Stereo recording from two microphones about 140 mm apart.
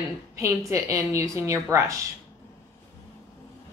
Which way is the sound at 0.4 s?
20° right (ahead or behind).